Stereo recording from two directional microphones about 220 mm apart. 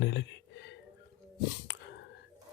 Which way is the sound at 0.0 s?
50° left (ahead or behind).